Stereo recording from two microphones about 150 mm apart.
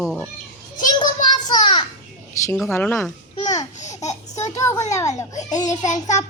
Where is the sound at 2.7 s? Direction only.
15° left (ahead or behind).